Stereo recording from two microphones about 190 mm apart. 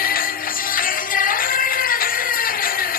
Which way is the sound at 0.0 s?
50° left (ahead or behind).